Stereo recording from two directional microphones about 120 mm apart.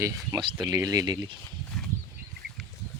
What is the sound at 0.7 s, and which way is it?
Speech, 25° right (ahead or behind).